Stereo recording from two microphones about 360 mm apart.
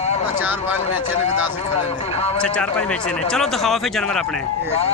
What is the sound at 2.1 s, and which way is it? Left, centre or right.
Speech, centre.